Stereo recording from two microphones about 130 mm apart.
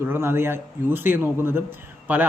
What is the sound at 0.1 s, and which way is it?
Speech, 20° right (ahead or behind).